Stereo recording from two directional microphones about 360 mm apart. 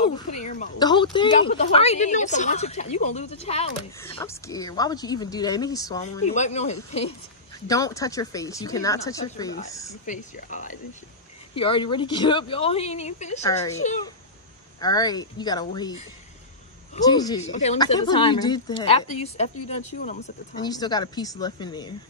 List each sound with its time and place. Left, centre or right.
0.4 s a woman's voice: centre
10.0 s a woman's voice: left
14.8 s speech: centre